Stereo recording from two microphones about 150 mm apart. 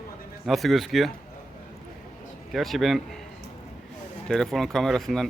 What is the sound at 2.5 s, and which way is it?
Speech, centre (ahead or behind).